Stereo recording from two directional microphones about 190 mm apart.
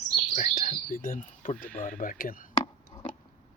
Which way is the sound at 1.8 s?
45° left (ahead or behind).